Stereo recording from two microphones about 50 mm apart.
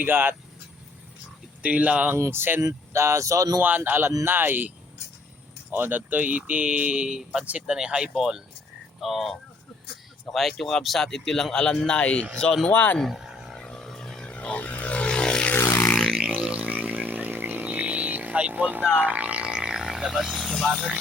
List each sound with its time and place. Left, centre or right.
0.0 s speech: right
1.6 s speech: right
2.1 s speech: right
2.6 s speech: right
3.6 s speech: right
5.7 s speech: right; by 12.5 s centre
12.7 s speech: left
13.1 s roaring cats: centre
13.6 s a sound: centre
14.3 s vehicle: left
16.5 s a sound: right
18.9 s music: right; by 20.4 s centre
20.4 s speech: centre